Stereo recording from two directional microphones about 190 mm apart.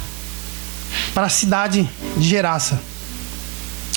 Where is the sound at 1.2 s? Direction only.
15° right (ahead or behind).